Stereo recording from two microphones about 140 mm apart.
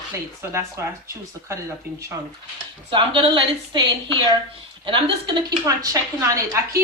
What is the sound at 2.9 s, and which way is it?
A woman's voice, 35° right (ahead or behind).